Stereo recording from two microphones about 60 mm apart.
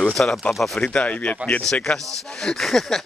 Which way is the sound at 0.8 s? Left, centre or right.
Left.